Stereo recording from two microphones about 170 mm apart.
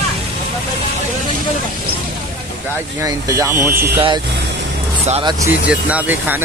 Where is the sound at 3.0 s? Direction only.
20° right (ahead or behind).